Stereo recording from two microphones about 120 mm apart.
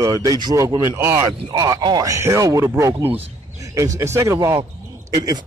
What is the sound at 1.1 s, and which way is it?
Speech, 35° right (ahead or behind).